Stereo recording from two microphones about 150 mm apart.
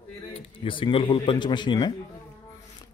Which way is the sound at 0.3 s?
35° left (ahead or behind).